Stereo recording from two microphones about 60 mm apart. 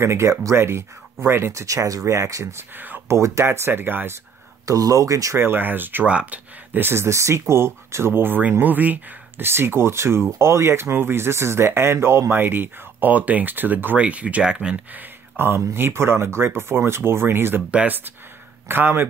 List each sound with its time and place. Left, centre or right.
0.0 s speech: right
1.5 s speech: right
2.7 s speech: right
3.1 s speech: right
3.4 s speech: right
4.6 s speech: right
5.4 s speech: right
6.0 s speech: right
6.8 s speech: right
9.5 s speech: right; by 14.8 s centre
14.9 s speech: right
17.6 s speech: right
18.7 s speech: right